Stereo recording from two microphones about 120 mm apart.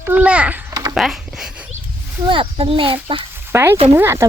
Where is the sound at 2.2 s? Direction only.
45° right (ahead or behind).